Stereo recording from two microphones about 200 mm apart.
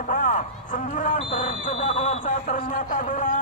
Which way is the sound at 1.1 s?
30° left (ahead or behind).